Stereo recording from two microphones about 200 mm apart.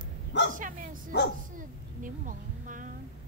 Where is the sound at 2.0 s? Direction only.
40° right (ahead or behind).